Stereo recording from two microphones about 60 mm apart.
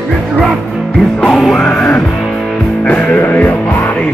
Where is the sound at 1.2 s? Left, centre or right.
Centre.